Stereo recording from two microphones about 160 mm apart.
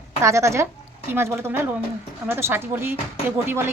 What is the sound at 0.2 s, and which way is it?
A woman's voice, 20° right (ahead or behind).